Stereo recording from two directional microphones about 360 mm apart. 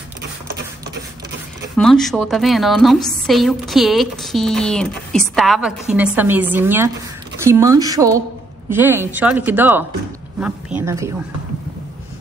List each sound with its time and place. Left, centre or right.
1.8 s a woman's voice: centre